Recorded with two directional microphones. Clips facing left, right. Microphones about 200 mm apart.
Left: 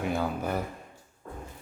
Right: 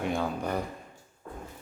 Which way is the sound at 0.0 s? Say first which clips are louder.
Left 1 dB; 5° left (ahead or behind).